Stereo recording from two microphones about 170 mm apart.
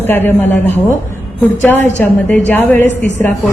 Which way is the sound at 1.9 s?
10° left (ahead or behind).